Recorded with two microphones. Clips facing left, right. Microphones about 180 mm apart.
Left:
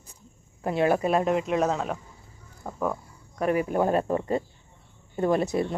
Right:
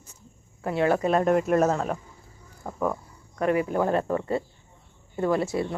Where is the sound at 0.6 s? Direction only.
15° left (ahead or behind); by 3.0 s centre (ahead or behind).